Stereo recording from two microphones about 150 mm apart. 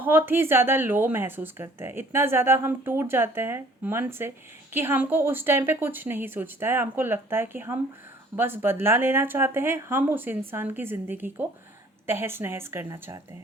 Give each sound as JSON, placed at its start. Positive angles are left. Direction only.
{"t": 0.0, "sound": "speech", "side_deg": -15}